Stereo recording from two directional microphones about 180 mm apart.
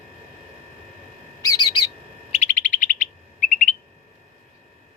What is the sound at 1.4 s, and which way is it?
Bird, 20° left (ahead or behind).